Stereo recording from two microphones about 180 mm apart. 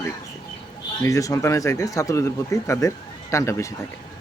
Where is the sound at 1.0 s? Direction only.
15° left (ahead or behind).